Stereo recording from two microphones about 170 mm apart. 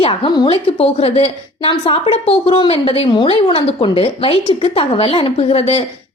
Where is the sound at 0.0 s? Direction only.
30° left (ahead or behind).